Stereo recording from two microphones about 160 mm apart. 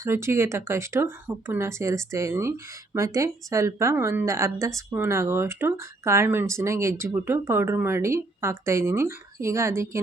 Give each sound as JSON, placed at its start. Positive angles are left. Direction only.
{"t": 0.0, "sound": "speech", "side_deg": -15}